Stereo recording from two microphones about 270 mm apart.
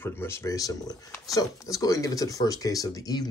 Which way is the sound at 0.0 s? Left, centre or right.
Centre.